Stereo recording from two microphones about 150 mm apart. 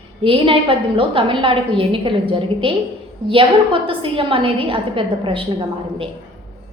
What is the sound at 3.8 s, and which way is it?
A woman's voice, 35° right (ahead or behind).